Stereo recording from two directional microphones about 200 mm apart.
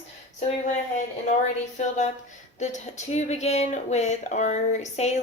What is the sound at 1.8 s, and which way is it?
A woman's voice, 35° left (ahead or behind).